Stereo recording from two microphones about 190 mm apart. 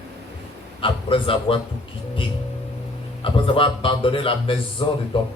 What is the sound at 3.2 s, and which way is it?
A man's voice, 25° left (ahead or behind).